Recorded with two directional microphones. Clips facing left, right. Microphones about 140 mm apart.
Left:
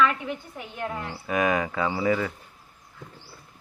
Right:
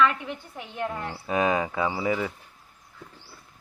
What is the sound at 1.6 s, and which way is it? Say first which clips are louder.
Speech: left 1 dB; 15° right (ahead or behind).